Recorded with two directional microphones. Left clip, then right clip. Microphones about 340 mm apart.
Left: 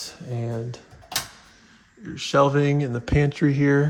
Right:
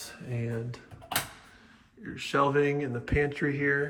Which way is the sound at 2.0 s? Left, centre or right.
Centre.